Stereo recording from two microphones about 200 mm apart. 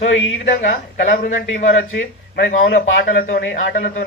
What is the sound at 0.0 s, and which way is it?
Speech, 75° left (ahead or behind).